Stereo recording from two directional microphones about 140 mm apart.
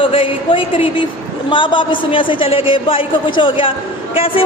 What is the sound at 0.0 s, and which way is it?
A woman's voice, 40° left (ahead or behind).